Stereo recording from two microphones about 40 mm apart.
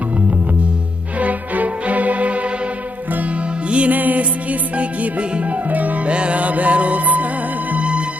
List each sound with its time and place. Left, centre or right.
1.2 s music: right
3.7 s music: right
3.9 s music: right
6.1 s music: right